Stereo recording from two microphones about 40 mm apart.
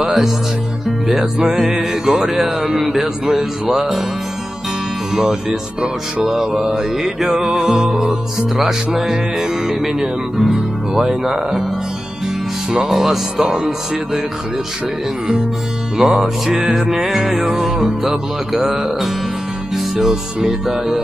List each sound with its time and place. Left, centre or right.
1.0 s speech: centre
5.1 s speech: centre
10.3 s speech: centre
12.9 s music: centre
13.4 s speech: centre
16.0 s speech: centre
19.7 s music: centre